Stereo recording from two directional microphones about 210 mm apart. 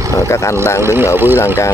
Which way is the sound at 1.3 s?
15° left (ahead or behind).